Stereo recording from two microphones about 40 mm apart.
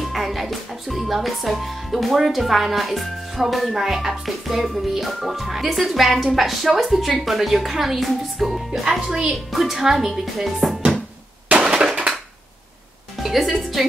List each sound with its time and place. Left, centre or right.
0.1 s speech: centre
9.1 s speech: centre
9.5 s speech: centre
11.6 s a sound: right
13.2 s a woman's voice: centre